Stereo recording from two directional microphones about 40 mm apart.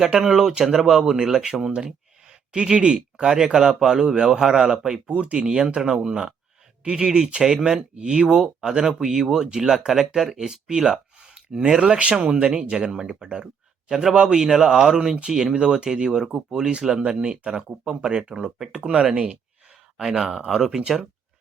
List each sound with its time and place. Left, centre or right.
0.2 s speech: centre
0.9 s speech: centre
5.0 s speech: right